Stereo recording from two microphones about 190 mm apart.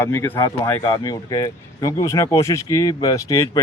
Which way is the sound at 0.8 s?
25° left (ahead or behind).